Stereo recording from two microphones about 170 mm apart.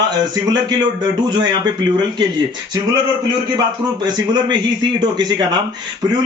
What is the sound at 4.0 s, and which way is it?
A man's voice, 25° right (ahead or behind).